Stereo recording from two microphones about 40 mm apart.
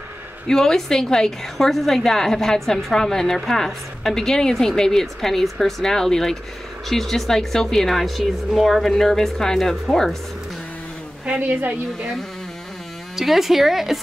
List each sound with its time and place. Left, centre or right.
0.5 s a woman's voice: centre
11.3 s a woman's voice: right
13.1 s speech: centre